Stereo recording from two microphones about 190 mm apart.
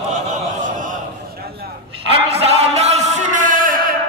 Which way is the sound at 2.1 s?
35° right (ahead or behind).